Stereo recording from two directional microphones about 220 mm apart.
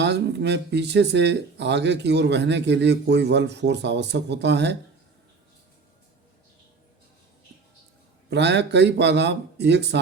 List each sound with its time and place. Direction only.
0.0 s speech: 50° right (ahead or behind)
8.3 s speech: 50° right (ahead or behind)